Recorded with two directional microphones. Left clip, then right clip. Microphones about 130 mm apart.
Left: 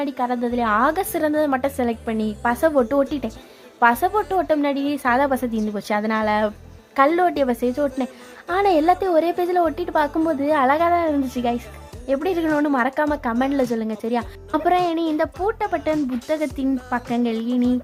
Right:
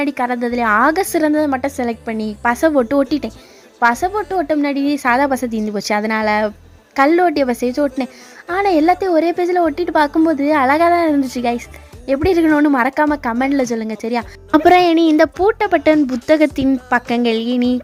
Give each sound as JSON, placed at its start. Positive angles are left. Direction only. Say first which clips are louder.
{"t": 0.0, "sound": "a woman's voice", "louder": "right 5 dB", "side_deg": -40}
{"t": 14.5, "sound": "a woman's voice", "louder": "right 9 dB", "side_deg": -45}